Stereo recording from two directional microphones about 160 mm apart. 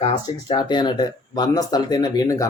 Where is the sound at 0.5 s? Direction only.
25° left (ahead or behind).